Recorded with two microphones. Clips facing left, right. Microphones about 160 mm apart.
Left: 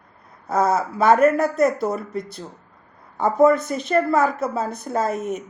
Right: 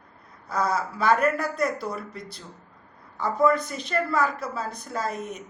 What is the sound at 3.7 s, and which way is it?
A woman's voice, 50° left (ahead or behind).